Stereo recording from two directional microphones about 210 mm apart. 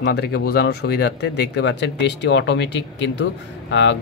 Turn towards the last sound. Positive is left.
turn(degrees=60)  # may be behind; listen again after turning